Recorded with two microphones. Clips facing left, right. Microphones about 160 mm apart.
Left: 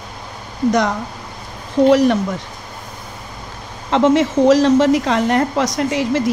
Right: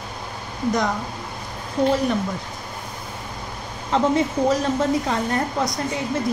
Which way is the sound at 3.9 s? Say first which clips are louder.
Left 6 dB; 90° left.